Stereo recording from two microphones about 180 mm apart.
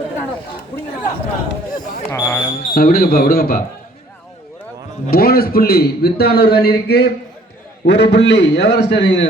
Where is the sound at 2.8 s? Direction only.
55° left (ahead or behind).